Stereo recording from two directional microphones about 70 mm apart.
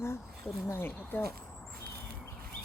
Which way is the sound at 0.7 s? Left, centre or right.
Left.